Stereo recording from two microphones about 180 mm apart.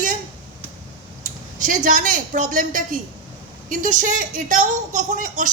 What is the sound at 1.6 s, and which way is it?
A woman's voice, 45° right (ahead or behind).